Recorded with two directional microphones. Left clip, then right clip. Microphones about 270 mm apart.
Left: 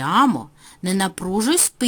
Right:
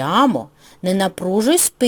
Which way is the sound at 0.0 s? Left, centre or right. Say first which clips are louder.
Right 1 dB; centre.